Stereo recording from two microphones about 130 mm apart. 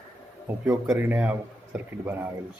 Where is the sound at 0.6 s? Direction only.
15° right (ahead or behind).